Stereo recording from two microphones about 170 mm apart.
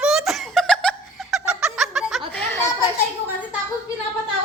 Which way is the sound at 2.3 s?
10° left (ahead or behind).